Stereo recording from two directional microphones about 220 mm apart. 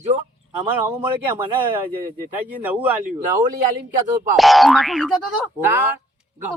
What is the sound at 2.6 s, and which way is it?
Speech, 5° right (ahead or behind).